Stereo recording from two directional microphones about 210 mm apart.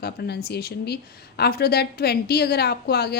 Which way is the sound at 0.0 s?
50° left (ahead or behind).